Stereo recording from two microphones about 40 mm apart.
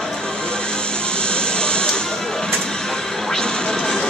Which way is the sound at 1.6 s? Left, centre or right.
Left.